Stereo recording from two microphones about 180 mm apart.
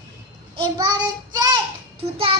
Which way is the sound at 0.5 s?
25° right (ahead or behind).